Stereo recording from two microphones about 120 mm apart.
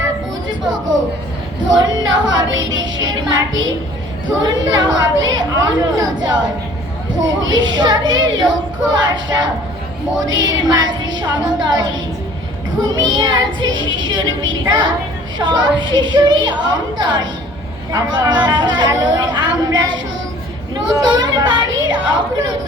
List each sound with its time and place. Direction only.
1.6 s child singing: 35° right (ahead or behind)
7.3 s child singing: 35° right (ahead or behind)